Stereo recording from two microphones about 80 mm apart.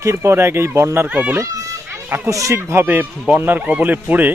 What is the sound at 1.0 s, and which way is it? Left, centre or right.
Speech, centre.